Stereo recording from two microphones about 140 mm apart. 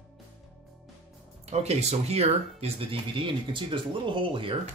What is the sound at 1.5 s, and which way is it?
Speech, 50° right (ahead or behind).